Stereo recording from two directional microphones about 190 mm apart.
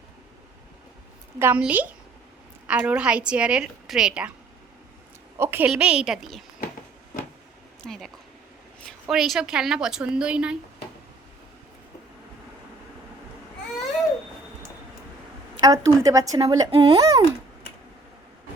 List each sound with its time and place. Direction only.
1.4 s a woman's voice: 10° right (ahead or behind)
5.4 s a woman's voice: 10° right (ahead or behind)
7.9 s a woman's voice: centre (ahead or behind)
15.6 s a woman's voice: 20° right (ahead or behind)